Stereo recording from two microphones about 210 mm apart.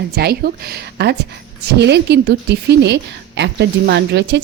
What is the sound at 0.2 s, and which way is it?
A woman's voice, 50° right (ahead or behind).